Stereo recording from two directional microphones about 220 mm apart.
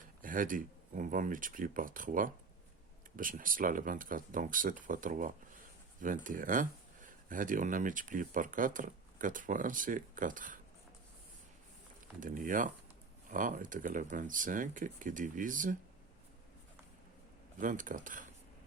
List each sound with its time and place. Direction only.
0.2 s speech: 40° right (ahead or behind)
12.2 s speech: 35° right (ahead or behind)
17.6 s speech: 35° right (ahead or behind)